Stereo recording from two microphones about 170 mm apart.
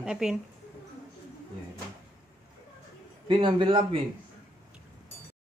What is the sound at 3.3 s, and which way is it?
Speech, 30° right (ahead or behind).